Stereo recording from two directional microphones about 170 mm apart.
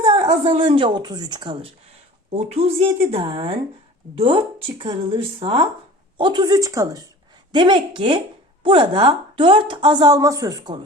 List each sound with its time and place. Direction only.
0.0 s a woman's voice: 30° right (ahead or behind)